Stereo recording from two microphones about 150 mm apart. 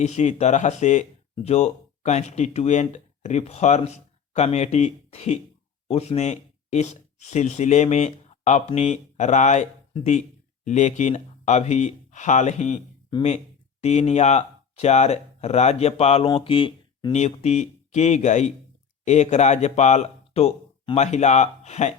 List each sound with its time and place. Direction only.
0.0 s speech: 50° left (ahead or behind)
13.8 s speech: 45° left (ahead or behind)
17.2 s speech: 50° left (ahead or behind)